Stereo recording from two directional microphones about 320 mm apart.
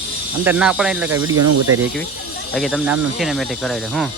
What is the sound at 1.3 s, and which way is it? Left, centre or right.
Speech, right.